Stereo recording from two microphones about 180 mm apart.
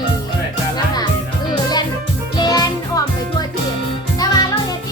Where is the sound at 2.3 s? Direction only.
20° left (ahead or behind).